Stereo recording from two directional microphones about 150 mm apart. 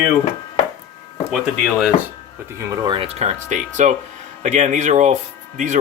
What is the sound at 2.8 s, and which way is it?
Speech, 35° right (ahead or behind).